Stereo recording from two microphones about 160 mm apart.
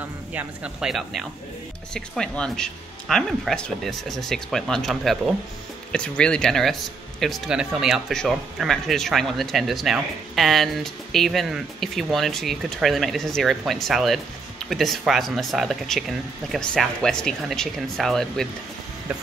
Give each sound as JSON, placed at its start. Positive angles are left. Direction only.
{"t": 0.3, "sound": "speech", "side_deg": -5}